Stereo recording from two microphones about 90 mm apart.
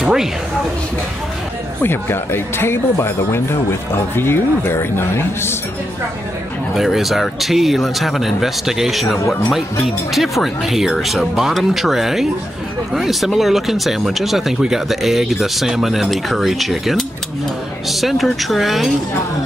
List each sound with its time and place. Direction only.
0.0 s a sound: 5° right (ahead or behind)
1.8 s a man's voice: 25° left (ahead or behind)
6.7 s speech: 5° right (ahead or behind)